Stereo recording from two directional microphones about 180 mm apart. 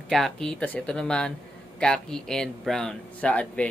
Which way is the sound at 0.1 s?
Centre (ahead or behind).